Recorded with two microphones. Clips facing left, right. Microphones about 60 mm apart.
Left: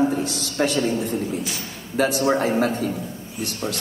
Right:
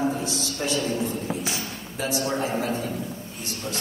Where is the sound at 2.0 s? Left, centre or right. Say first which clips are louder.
Left 7 dB; left.